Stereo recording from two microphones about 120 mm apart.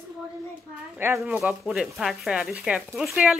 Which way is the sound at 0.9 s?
20° right (ahead or behind).